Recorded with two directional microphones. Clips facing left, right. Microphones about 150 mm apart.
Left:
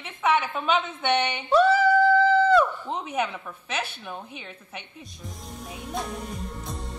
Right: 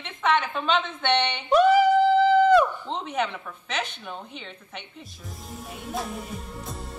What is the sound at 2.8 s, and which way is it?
Speech, 10° left (ahead or behind).